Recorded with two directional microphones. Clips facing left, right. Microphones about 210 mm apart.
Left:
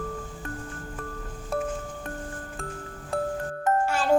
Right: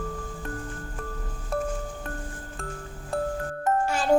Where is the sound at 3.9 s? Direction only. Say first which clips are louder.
Even; 15° right (ahead or behind).